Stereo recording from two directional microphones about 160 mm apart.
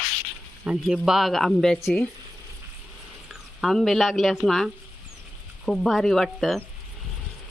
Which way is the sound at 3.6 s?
Centre (ahead or behind).